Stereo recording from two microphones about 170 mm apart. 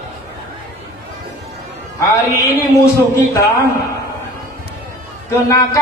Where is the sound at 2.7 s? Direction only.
20° left (ahead or behind).